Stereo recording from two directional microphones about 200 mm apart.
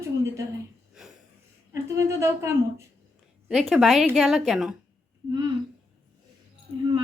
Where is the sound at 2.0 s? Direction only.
15° right (ahead or behind).